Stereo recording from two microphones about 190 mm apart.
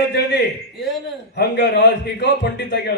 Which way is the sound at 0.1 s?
65° left (ahead or behind).